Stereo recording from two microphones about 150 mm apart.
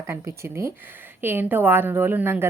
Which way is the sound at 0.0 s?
20° right (ahead or behind).